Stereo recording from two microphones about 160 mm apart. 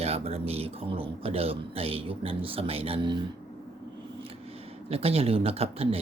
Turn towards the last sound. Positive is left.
turn(degrees=-40)  # may be behind; listen again after turning